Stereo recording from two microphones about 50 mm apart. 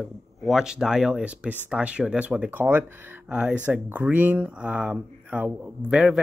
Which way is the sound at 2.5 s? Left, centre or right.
Right.